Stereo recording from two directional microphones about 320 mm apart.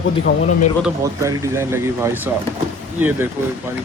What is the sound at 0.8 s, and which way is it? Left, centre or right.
Speech, centre.